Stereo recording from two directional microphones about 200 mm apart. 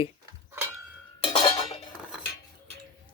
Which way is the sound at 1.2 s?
25° left (ahead or behind).